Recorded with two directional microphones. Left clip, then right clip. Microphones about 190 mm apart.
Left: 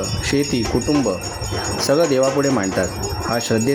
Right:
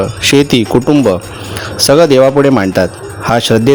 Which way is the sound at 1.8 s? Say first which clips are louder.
Right 10 dB; 45° right (ahead or behind).